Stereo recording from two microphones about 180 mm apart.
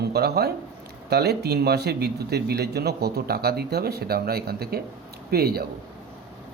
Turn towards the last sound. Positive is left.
turn(degrees=-60)  # may be behind; listen again after turning